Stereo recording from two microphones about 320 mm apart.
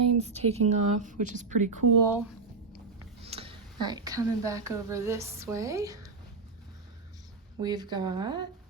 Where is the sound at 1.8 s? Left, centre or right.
Right.